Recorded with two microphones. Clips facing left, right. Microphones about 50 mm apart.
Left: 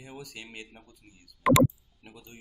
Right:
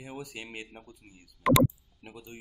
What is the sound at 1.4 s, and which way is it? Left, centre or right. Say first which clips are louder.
Speech: left 2 dB; centre.